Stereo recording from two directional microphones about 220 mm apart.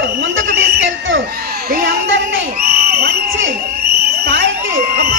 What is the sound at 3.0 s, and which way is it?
Crowd, 45° right (ahead or behind).